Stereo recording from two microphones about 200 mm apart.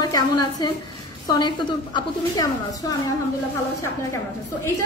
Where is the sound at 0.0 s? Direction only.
20° left (ahead or behind).